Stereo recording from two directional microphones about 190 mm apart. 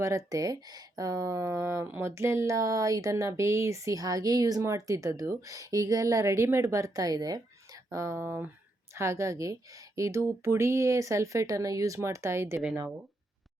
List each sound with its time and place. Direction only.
0.0 s speech: 15° right (ahead or behind)